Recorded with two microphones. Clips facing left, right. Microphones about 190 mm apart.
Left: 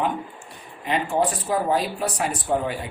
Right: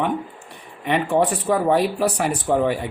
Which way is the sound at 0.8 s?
65° right (ahead or behind).